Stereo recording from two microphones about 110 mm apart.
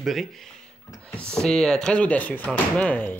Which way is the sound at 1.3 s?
5° left (ahead or behind).